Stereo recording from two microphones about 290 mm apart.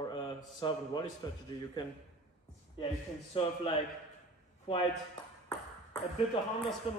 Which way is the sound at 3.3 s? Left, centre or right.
Centre.